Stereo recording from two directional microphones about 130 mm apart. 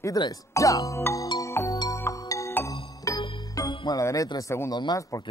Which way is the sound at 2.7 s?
35° left (ahead or behind).